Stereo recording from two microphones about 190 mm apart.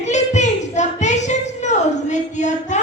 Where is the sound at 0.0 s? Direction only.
40° left (ahead or behind).